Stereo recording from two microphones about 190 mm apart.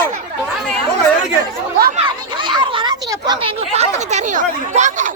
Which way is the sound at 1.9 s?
25° right (ahead or behind).